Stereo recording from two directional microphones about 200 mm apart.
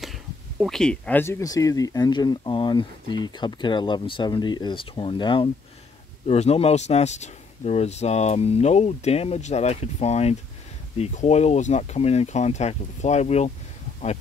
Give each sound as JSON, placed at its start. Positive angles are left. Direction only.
{"t": 0.0, "sound": "speech", "side_deg": 0}